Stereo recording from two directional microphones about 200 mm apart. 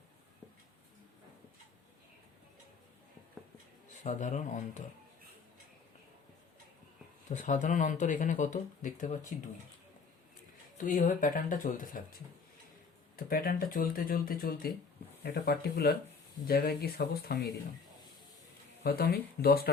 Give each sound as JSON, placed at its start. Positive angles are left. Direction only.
{"t": 4.0, "sound": "speech", "side_deg": 40}
{"t": 7.3, "sound": "speech", "side_deg": 40}
{"t": 10.8, "sound": "speech", "side_deg": 45}
{"t": 13.1, "sound": "speech", "side_deg": 50}
{"t": 18.8, "sound": "speech", "side_deg": 50}